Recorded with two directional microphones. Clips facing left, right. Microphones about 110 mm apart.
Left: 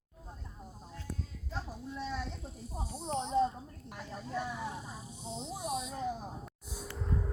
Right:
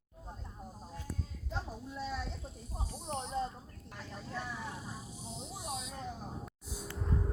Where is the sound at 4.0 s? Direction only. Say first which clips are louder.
Left 4 dB; 10° left (ahead or behind).